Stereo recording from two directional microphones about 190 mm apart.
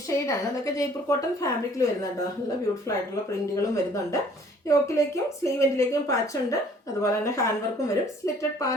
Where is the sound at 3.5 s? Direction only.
15° left (ahead or behind).